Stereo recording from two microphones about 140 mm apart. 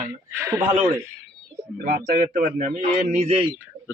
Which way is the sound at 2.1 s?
75° right (ahead or behind).